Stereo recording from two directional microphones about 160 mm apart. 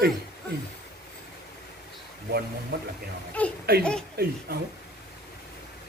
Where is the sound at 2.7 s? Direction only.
85° right.